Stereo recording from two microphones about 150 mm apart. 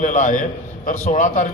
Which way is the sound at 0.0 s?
60° left (ahead or behind).